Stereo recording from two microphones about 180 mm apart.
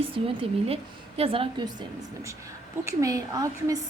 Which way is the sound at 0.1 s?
30° right (ahead or behind).